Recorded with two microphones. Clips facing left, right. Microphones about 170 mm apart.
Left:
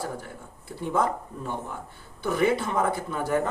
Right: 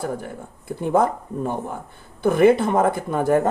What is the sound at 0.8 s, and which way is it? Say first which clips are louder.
Speech: right 7 dB; 55° right (ahead or behind).